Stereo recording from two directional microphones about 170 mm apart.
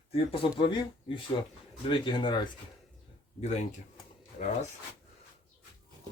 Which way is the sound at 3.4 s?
40° left (ahead or behind).